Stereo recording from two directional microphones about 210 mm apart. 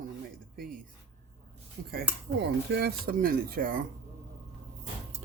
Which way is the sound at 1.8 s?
50° right (ahead or behind).